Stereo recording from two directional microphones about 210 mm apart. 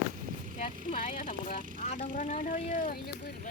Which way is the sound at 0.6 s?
35° left (ahead or behind).